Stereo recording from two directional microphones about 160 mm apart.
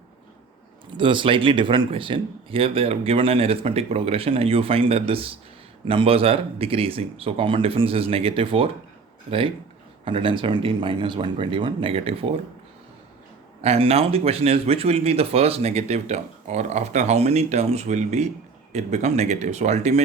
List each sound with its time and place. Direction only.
0.9 s speech: 30° right (ahead or behind)
10.0 s speech: 35° right (ahead or behind)
13.6 s speech: 40° right (ahead or behind)